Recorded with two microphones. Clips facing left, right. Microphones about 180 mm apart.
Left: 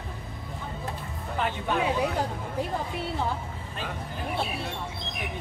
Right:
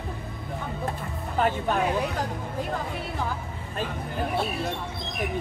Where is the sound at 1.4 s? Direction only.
45° right (ahead or behind).